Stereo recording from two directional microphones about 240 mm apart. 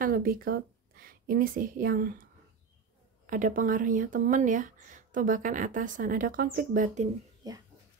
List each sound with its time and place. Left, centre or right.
0.0 s a woman's voice: right
3.3 s speech: right
7.4 s speech: centre